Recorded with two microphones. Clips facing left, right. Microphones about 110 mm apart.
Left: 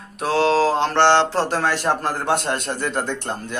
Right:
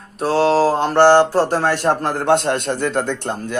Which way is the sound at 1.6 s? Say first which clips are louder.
Right 3 dB; 55° right (ahead or behind).